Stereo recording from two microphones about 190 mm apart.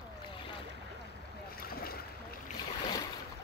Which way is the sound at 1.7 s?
50° left (ahead or behind).